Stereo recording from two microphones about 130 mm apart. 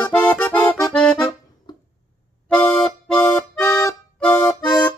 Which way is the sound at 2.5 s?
5° left (ahead or behind).